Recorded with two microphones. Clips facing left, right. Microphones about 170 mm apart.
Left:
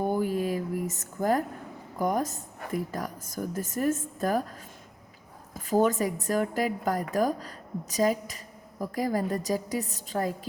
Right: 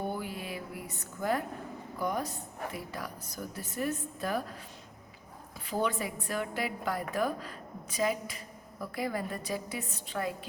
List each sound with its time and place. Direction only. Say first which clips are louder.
0.1 s a sound: left 10 dB; 45° left (ahead or behind)
2.0 s a woman's voice: left 6 dB; 45° left (ahead or behind)
5.5 s a woman's voice: left 8 dB; 45° left (ahead or behind)